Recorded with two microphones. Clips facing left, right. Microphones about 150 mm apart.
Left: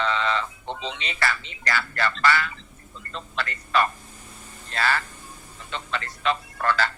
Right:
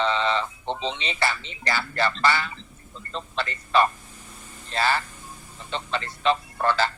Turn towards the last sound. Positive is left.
turn(degrees=-25)  # may be behind; listen again after turning